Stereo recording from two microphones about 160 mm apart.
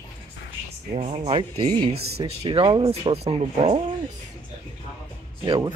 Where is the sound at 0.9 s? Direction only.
40° right (ahead or behind).